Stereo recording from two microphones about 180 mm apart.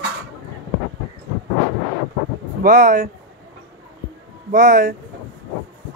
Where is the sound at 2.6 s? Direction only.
45° right (ahead or behind).